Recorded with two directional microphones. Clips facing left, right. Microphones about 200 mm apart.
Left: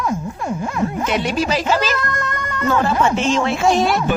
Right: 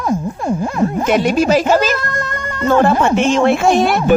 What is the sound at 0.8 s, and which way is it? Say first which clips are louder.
Speech: right 6 dB; 45° right (ahead or behind).